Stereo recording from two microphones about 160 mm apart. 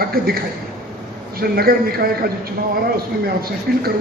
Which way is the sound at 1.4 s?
70° right (ahead or behind).